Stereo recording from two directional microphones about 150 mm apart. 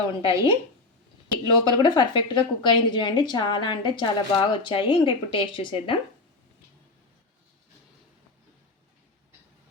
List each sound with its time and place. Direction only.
0.2 s a woman's voice: 40° left (ahead or behind)
1.5 s a woman's voice: 30° left (ahead or behind)